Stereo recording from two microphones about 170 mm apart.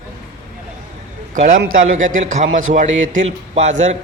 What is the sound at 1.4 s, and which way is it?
A man's voice, 45° right (ahead or behind).